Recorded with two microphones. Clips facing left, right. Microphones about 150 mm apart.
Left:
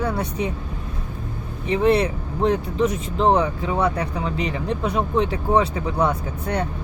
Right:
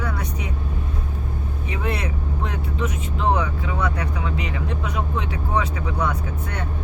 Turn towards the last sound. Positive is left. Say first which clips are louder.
# left 4 dB
turn(degrees=30)  # may be behind; listen again after turning